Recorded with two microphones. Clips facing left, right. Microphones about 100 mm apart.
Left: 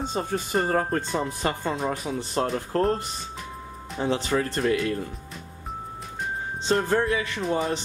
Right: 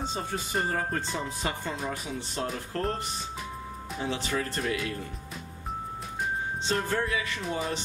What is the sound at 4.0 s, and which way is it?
Speech, 35° left (ahead or behind).